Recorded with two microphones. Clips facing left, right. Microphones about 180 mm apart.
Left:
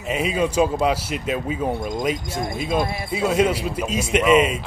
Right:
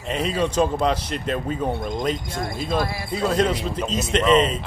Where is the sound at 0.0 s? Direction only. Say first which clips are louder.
Left 1 dB; 10° left (ahead or behind).